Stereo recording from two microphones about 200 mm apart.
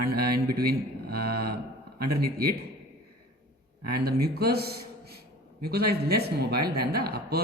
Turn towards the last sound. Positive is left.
turn(degrees=-50)  # may be behind; listen again after turning